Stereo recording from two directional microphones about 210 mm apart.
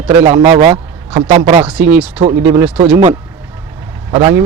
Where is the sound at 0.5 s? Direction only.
25° right (ahead or behind).